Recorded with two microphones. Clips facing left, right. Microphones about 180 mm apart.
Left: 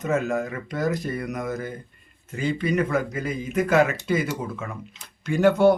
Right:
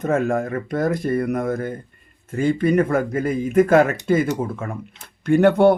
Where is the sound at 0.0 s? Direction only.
50° right (ahead or behind).